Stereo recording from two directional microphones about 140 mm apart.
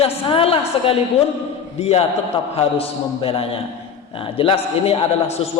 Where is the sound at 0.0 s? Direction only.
40° left (ahead or behind).